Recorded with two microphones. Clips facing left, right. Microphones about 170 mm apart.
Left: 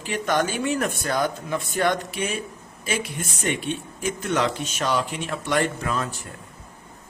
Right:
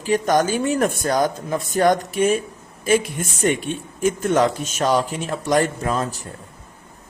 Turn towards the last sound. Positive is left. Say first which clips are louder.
# right 4 dB
turn(degrees=-35)  # may be behind; listen again after turning